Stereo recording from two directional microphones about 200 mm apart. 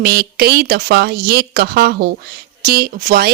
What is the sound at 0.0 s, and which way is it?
A woman's voice, 50° right (ahead or behind).